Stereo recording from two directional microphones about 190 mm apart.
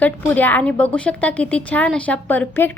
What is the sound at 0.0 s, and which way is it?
A woman's voice, 10° left (ahead or behind).